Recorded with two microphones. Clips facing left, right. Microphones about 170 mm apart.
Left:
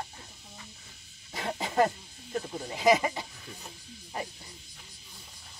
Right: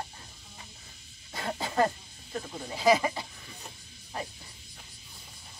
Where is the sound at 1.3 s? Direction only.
15° left (ahead or behind).